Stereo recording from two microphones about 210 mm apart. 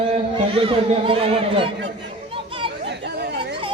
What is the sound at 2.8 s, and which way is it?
Chatter, 55° right (ahead or behind).